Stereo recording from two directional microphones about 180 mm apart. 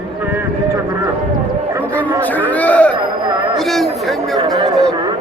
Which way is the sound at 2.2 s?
10° left (ahead or behind).